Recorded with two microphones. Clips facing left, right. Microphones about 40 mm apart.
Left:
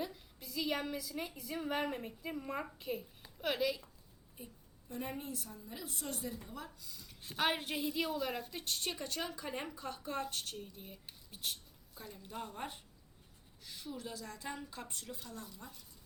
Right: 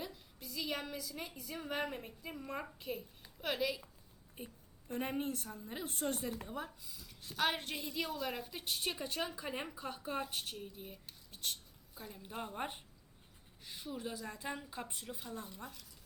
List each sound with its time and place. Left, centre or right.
0.0 s a sound: centre
1.4 s a woman's voice: centre
4.4 s a woman's voice: right
6.5 s a woman's voice: right
6.8 s a sound: centre
7.3 s a woman's voice: centre
12.0 s a woman's voice: centre